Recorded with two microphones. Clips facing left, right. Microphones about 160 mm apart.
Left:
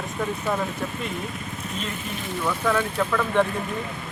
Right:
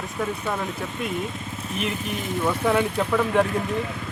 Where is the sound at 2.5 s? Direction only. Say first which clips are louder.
Right 2 dB; 20° right (ahead or behind).